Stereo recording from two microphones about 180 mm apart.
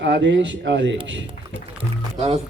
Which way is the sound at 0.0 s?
80° right.